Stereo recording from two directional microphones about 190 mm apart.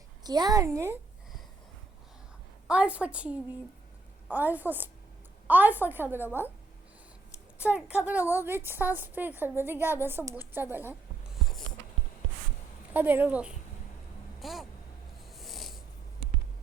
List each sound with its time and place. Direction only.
0.2 s a woman's voice: 20° right (ahead or behind)
2.6 s a woman's voice: 5° right (ahead or behind)
7.6 s a woman's voice: 5° right (ahead or behind)
12.9 s a woman's voice: 10° right (ahead or behind)
15.3 s cat: centre (ahead or behind)